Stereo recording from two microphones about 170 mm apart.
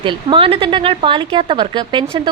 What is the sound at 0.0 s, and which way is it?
A woman's voice, 30° right (ahead or behind).